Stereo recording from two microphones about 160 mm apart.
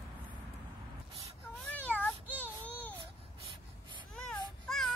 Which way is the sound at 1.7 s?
10° left (ahead or behind).